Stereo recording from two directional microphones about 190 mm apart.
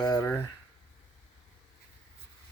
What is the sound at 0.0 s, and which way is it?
Speech, 15° left (ahead or behind).